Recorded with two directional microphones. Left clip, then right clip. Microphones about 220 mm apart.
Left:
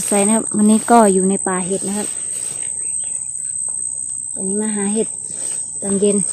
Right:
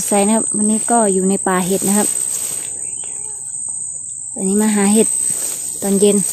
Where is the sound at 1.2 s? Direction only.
5° right (ahead or behind).